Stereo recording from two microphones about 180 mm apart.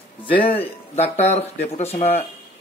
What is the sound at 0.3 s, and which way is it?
A man's voice, 30° left (ahead or behind).